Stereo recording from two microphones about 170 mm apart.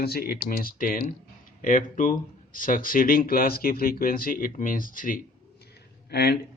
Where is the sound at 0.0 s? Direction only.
65° left (ahead or behind).